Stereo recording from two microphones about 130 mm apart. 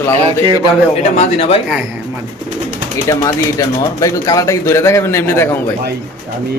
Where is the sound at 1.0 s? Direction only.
55° left (ahead or behind).